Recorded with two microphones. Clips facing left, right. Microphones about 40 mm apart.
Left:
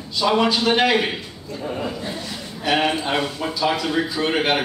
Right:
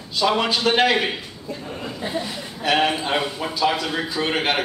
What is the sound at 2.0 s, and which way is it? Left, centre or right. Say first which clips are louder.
Speech: right 3 dB; centre.